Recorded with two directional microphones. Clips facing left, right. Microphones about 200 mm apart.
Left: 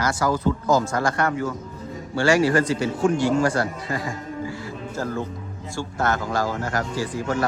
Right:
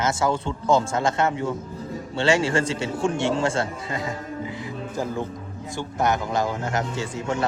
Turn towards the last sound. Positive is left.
turn(degrees=-25)  # may be behind; listen again after turning